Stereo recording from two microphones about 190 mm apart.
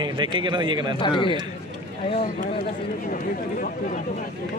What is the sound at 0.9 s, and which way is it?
Speech, 25° left (ahead or behind).